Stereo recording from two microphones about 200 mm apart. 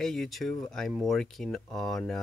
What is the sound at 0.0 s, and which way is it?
Speech, centre (ahead or behind).